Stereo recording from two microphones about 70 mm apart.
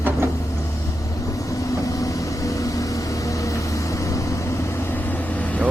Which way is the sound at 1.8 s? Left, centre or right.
Left.